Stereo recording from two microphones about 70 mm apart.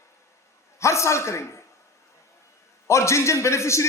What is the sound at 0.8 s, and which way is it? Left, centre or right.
Speech, left.